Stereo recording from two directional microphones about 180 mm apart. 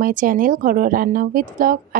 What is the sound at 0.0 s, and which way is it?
A woman's voice, 50° right (ahead or behind).